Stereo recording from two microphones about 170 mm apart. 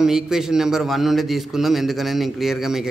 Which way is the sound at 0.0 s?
Centre (ahead or behind).